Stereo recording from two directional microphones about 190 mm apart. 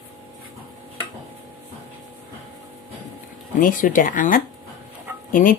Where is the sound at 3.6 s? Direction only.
45° left (ahead or behind).